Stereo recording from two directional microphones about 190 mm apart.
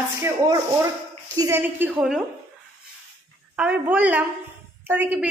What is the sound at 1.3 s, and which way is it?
Speech, 15° right (ahead or behind).